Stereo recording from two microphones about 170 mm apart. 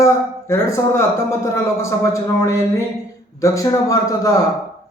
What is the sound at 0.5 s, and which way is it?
Speech, 15° left (ahead or behind).